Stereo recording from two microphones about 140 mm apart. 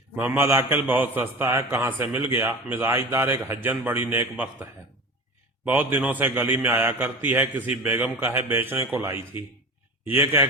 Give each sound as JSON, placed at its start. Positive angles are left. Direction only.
{"t": 0.2, "sound": "a man's voice", "side_deg": -15}